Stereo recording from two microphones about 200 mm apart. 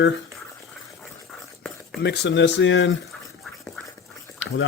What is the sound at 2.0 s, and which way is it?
Speech, 55° left (ahead or behind).